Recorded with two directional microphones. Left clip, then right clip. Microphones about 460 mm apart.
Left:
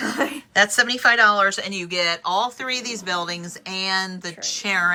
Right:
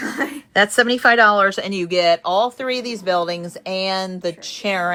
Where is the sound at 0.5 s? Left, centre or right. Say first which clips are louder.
Right 3 dB; centre.